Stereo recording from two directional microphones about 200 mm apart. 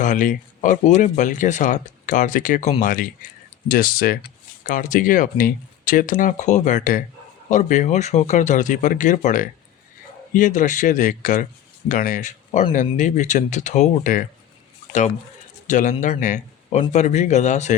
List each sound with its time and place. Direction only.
0.0 s speech: 40° left (ahead or behind)
15.6 s speech: 40° left (ahead or behind)